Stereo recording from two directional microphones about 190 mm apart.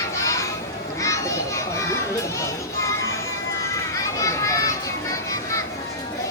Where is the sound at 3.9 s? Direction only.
15° left (ahead or behind).